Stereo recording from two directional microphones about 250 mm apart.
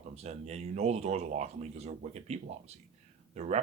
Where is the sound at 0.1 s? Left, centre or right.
Right.